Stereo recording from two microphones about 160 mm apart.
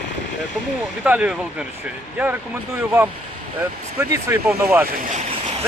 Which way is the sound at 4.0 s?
15° right (ahead or behind).